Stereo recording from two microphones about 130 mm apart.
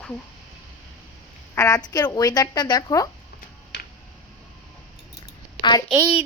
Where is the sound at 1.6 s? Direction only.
25° left (ahead or behind).